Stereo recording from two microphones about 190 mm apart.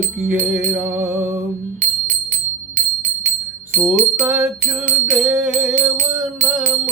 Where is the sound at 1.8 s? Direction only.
40° right (ahead or behind).